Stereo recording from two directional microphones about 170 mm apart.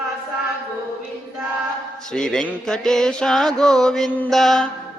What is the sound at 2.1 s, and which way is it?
Music, 5° left (ahead or behind).